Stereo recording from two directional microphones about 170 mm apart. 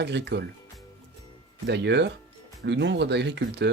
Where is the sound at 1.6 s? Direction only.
90° right.